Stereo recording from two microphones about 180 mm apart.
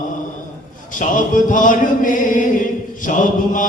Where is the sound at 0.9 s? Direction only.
45° left (ahead or behind).